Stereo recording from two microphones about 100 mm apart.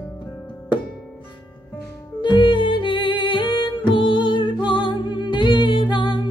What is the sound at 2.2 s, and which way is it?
Music, 55° left (ahead or behind).